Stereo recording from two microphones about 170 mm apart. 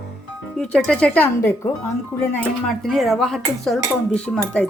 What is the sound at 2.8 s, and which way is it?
A woman's voice, centre (ahead or behind).